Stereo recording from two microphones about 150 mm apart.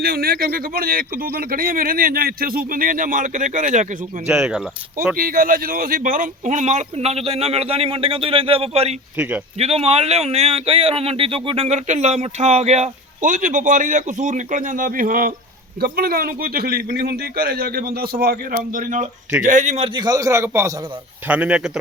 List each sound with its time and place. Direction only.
0.0 s a man's voice: 90° right; by 3.9 s 55° right (ahead or behind)
4.3 s speech: 5° right (ahead or behind)
5.1 s speech: 70° right (ahead or behind); by 9.0 s 45° right (ahead or behind)
9.1 s a man's voice: 10° right (ahead or behind)
9.6 s speech: 45° right (ahead or behind); by 15.3 s 65° right (ahead or behind)
15.8 s a man's voice: 80° right; by 19.9 s 50° right (ahead or behind)
19.9 s a man's voice: 25° right (ahead or behind); by 21.7 s 10° right (ahead or behind)